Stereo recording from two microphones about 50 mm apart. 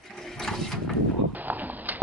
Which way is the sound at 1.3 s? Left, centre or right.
Right.